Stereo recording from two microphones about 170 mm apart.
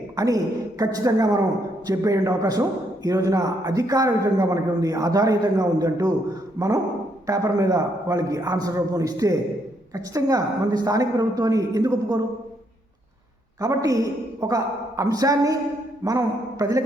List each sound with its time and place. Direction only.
0.2 s a man's voice: 20° right (ahead or behind)
13.6 s a man's voice: 20° right (ahead or behind)